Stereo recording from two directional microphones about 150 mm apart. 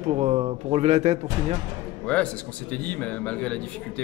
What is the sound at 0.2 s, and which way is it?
Speech, 40° right (ahead or behind).